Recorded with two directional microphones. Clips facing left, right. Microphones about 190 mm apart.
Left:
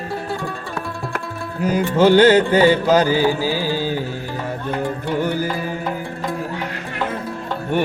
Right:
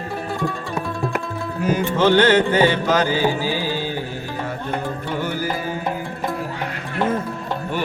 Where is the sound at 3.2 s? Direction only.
15° right (ahead or behind).